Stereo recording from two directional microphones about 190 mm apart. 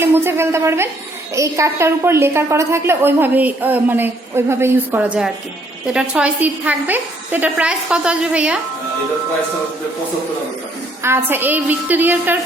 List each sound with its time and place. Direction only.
0.0 s a woman's voice: 10° right (ahead or behind)
11.0 s a woman's voice: 10° right (ahead or behind)